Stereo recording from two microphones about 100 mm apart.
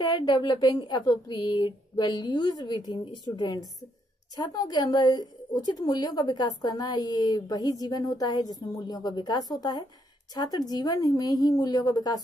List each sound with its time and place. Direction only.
0.0 s a woman's voice: 45° left (ahead or behind)